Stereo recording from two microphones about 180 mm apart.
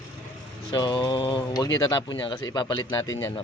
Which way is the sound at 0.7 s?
25° left (ahead or behind).